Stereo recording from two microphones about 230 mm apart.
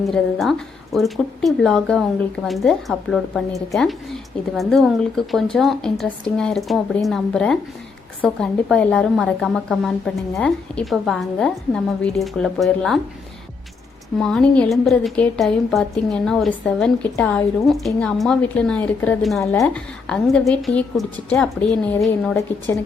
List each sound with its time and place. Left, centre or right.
0.0 s a woman's voice: centre
14.2 s a woman's voice: centre